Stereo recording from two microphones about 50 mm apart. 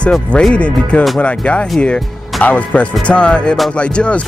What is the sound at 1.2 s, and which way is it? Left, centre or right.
Speech, left.